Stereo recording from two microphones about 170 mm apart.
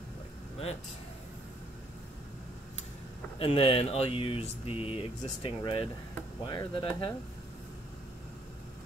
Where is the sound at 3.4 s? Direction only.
35° left (ahead or behind).